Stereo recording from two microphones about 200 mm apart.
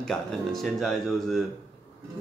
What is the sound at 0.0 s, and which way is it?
Speech, 5° left (ahead or behind).